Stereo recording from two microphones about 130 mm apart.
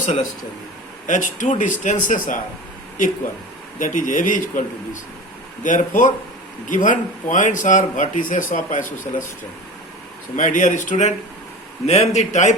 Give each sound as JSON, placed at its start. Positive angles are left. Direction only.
{"t": 0.0, "sound": "a man's voice", "side_deg": 70}
{"t": 3.8, "sound": "speech", "side_deg": 80}
{"t": 5.6, "sound": "speech", "side_deg": 80}
{"t": 10.3, "sound": "a man's voice", "side_deg": 75}
{"t": 11.9, "sound": "a man's voice", "side_deg": 55}